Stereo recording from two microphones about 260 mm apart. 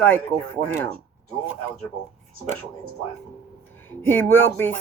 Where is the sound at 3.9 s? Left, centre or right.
Centre.